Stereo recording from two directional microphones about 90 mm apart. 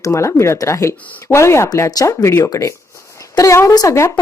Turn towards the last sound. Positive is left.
turn(degrees=45)  # may be behind; listen again after turning